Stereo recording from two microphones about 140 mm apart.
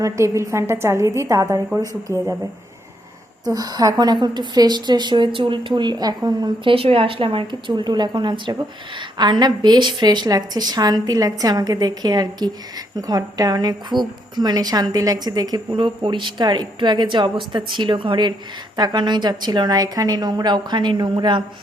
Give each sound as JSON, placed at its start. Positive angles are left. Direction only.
{"t": 0.0, "sound": "a woman's voice", "side_deg": -20}
{"t": 3.4, "sound": "a woman's voice", "side_deg": -25}